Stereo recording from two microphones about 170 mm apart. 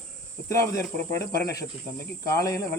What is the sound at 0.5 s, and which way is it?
Speech, 20° left (ahead or behind).